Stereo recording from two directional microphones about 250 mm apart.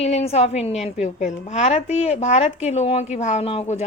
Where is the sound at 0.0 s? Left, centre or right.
Left.